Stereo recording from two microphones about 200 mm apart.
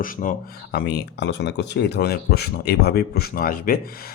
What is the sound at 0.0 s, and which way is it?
A man's voice, 40° left (ahead or behind).